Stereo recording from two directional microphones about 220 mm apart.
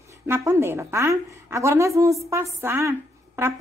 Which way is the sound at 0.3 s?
10° right (ahead or behind).